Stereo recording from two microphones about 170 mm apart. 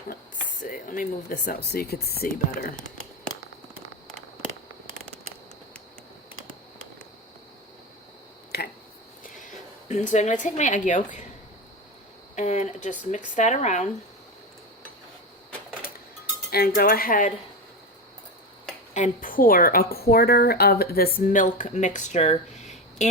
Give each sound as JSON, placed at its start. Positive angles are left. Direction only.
{"t": 0.6, "sound": "a woman's voice", "side_deg": 55}
{"t": 2.5, "sound": "a woman's voice", "side_deg": 55}
{"t": 9.2, "sound": "a sound", "side_deg": 50}
{"t": 9.9, "sound": "a woman's voice", "side_deg": 45}
{"t": 12.4, "sound": "a woman's voice", "side_deg": 40}
{"t": 16.5, "sound": "a woman's voice", "side_deg": 65}
{"t": 18.9, "sound": "a woman's voice", "side_deg": 50}
{"t": 22.6, "sound": "a sound", "side_deg": 45}